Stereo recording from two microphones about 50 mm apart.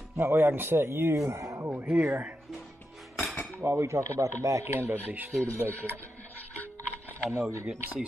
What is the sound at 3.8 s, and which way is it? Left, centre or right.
Speech, right.